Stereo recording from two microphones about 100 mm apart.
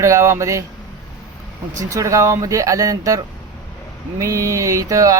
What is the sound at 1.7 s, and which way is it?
Speech, 30° right (ahead or behind).